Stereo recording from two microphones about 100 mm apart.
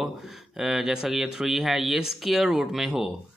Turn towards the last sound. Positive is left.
turn(degrees=-5)  # may be behind; listen again after turning